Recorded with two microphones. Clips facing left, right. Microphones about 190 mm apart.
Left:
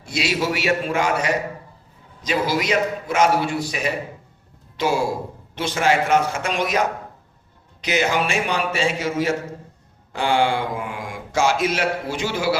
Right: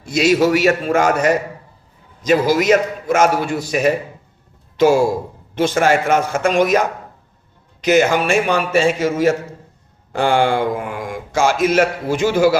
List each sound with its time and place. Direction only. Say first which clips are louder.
0.0 s speech: right 9 dB; 45° right (ahead or behind)